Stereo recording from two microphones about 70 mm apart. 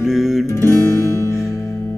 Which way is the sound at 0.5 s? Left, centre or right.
Left.